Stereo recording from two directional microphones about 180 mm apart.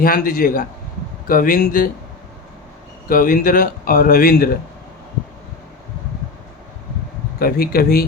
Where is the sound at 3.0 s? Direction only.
50° left (ahead or behind).